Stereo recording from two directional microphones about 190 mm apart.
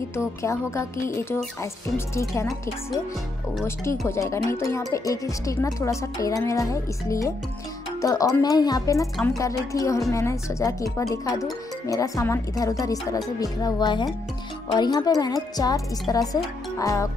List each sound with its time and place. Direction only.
0.1 s speech: 15° left (ahead or behind)
3.6 s a woman's voice: 15° left (ahead or behind)